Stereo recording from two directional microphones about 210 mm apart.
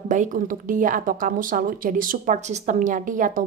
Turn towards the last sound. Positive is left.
turn(degrees=-40)  # may be behind; listen again after turning